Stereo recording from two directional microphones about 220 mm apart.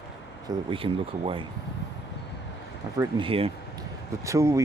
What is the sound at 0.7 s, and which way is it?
Speech, 25° right (ahead or behind).